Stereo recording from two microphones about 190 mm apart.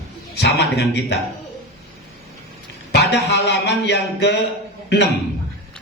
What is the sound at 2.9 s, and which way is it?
Speech, 65° left (ahead or behind).